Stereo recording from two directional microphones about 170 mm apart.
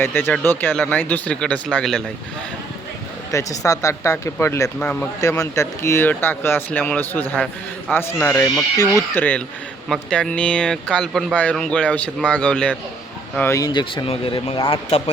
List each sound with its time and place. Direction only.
0.0 s speech: 15° left (ahead or behind)
3.3 s speech: 20° left (ahead or behind); by 15.1 s 35° left (ahead or behind)